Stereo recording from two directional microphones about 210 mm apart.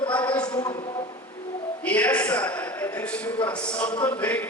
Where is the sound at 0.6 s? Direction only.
20° left (ahead or behind).